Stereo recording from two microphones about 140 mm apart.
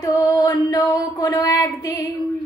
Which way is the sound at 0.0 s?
30° left (ahead or behind).